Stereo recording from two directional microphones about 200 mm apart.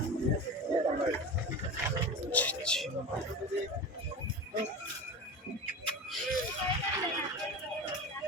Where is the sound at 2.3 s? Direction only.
5° left (ahead or behind).